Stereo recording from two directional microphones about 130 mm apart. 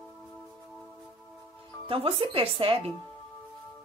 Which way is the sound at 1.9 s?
45° right (ahead or behind).